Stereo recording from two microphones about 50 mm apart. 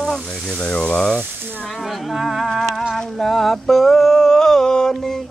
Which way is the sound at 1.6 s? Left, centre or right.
Centre.